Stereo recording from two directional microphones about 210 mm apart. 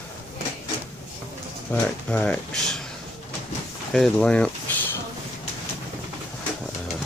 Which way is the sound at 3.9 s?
Centre (ahead or behind).